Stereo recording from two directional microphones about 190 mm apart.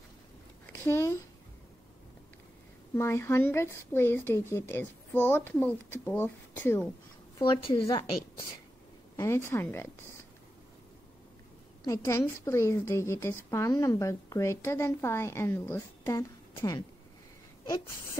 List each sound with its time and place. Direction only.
0.7 s speech: 15° left (ahead or behind)
2.9 s a woman's voice: 15° left (ahead or behind)
7.3 s a woman's voice: 25° left (ahead or behind)
9.1 s a woman's voice: 15° left (ahead or behind)
11.8 s a woman's voice: 15° left (ahead or behind)